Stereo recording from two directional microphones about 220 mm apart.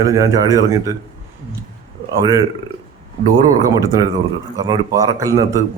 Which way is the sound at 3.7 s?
15° right (ahead or behind).